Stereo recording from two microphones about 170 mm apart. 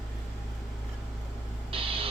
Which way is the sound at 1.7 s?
35° right (ahead or behind).